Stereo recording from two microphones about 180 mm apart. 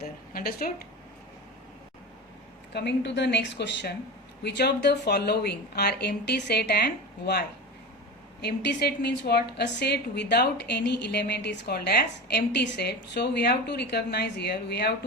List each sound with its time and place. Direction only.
0.0 s a woman's voice: 55° left (ahead or behind)
2.7 s a woman's voice: 70° left (ahead or behind)